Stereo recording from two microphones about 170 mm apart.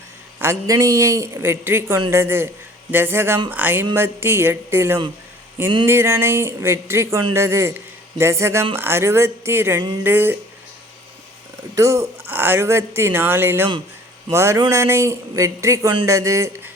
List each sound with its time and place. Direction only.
0.3 s a woman's voice: 15° right (ahead or behind)
11.7 s a woman's voice: 20° right (ahead or behind)